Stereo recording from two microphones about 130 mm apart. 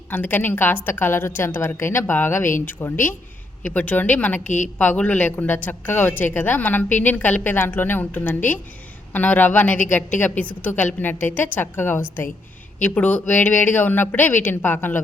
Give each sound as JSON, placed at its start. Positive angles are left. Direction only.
{"t": 0.1, "sound": "a woman's voice", "side_deg": 15}